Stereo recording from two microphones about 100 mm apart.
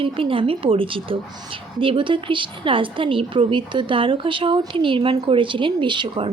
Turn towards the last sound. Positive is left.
turn(degrees=-55)  # may be behind; listen again after turning